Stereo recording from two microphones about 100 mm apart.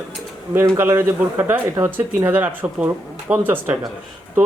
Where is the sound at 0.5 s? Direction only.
25° right (ahead or behind).